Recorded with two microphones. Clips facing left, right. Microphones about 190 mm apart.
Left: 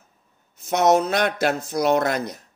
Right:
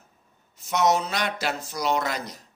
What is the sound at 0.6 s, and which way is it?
A man's voice, 50° left (ahead or behind).